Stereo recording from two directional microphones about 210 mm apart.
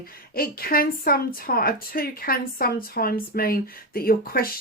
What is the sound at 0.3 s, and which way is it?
A woman's voice, 45° left (ahead or behind).